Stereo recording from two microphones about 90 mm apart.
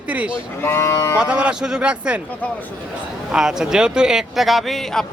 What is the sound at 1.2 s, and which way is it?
Speech, 10° right (ahead or behind).